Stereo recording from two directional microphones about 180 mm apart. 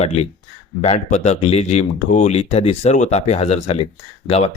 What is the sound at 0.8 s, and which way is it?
Speech, 40° left (ahead or behind).